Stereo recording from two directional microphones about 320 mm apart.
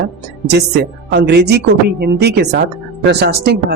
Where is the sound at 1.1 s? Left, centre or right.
Right.